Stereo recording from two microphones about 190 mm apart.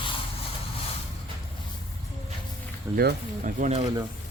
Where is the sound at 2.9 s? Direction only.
50° right (ahead or behind).